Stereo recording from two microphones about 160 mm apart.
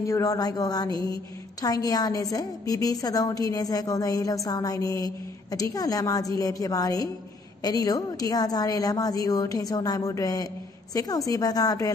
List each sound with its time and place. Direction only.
0.0 s a woman's voice: 20° left (ahead or behind)